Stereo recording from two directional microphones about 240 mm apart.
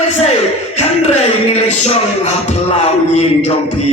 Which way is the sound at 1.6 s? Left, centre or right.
Left.